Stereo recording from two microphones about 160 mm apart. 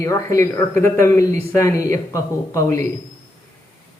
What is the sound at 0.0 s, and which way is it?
Speech, 20° left (ahead or behind).